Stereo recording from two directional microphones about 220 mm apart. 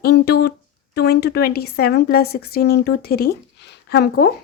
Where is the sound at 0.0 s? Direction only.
50° left (ahead or behind).